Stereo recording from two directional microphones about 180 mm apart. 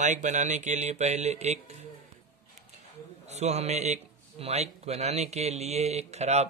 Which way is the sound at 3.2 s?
40° right (ahead or behind).